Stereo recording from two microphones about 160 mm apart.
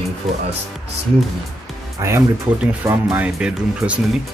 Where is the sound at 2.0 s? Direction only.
20° right (ahead or behind).